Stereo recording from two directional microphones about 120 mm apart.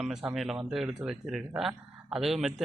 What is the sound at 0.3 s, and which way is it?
Speech, 5° right (ahead or behind).